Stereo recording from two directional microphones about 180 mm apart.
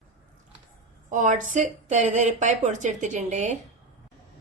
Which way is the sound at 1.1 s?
45° right (ahead or behind).